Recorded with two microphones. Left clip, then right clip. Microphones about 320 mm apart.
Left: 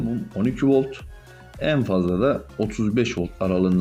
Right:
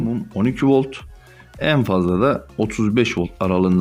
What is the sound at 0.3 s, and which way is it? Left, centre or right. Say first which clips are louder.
Speech: right 3 dB; centre.